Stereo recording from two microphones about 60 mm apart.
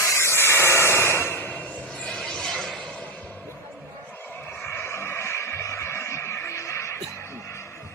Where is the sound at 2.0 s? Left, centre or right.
Centre.